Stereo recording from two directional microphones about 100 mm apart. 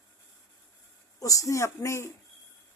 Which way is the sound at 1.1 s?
35° left (ahead or behind).